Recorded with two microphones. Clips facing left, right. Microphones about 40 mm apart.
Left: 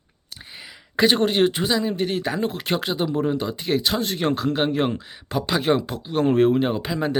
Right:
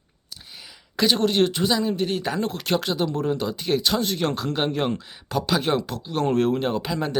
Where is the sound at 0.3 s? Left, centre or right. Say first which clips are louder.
Left 3 dB; left.